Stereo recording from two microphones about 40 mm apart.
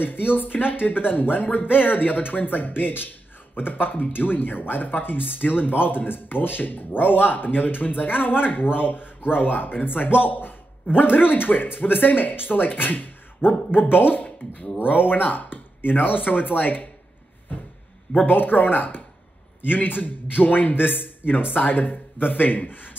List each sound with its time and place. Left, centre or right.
0.0 s speech: left
14.2 s a sound: left
14.8 s speech: left
18.2 s speech: left